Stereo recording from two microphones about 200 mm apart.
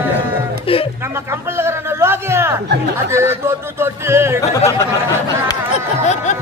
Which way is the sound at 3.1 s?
15° right (ahead or behind).